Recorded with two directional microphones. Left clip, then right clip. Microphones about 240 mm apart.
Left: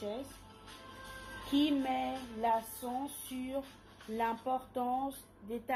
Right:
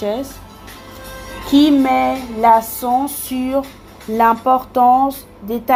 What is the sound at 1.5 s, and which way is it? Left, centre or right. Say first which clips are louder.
Speech: right 19 dB; right.